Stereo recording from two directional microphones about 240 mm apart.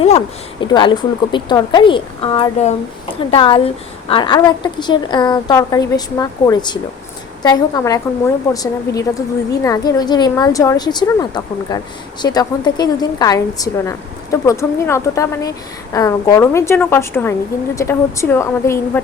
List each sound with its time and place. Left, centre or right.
0.6 s a woman's voice: centre